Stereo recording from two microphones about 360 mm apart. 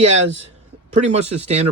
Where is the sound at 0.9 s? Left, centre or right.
Centre.